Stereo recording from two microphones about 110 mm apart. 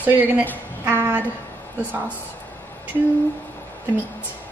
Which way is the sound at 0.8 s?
20° right (ahead or behind).